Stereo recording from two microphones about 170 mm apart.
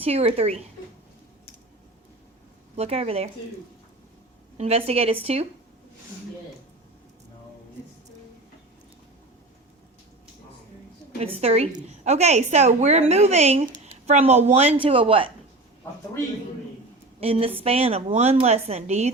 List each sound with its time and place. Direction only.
0.0 s a woman's voice: 35° right (ahead or behind)
2.7 s a woman's voice: 35° right (ahead or behind)
4.5 s a woman's voice: 40° right (ahead or behind)
11.2 s a woman's voice: 35° right (ahead or behind)
17.2 s a woman's voice: 35° right (ahead or behind)